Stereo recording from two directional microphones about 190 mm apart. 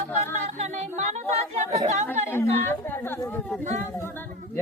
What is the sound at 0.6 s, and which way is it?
Music, 35° right (ahead or behind).